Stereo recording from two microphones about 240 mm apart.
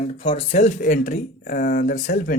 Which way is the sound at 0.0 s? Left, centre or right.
Left.